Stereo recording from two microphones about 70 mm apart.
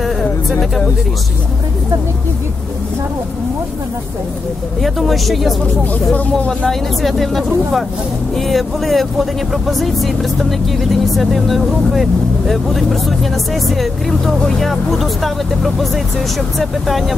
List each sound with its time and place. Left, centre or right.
0.5 s speech: centre
4.8 s speech: centre
6.1 s speech: centre
6.7 s speech: centre